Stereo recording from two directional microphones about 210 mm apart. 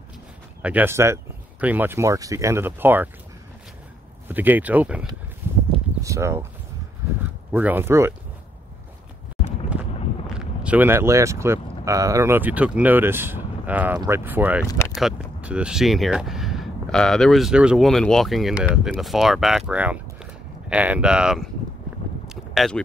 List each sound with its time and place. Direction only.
0.6 s speech: 5° right (ahead or behind)
4.3 s speech: 10° right (ahead or behind)
5.4 s a sound: 10° right (ahead or behind)
6.0 s speech: 15° right (ahead or behind)
7.5 s speech: 10° right (ahead or behind)
9.7 s speech: 5° right (ahead or behind)
14.7 s a sound: 15° left (ahead or behind)
15.0 s speech: 5° right (ahead or behind)
22.3 s a sound: centre (ahead or behind)